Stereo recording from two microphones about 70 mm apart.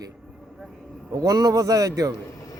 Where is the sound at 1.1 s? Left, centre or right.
Right.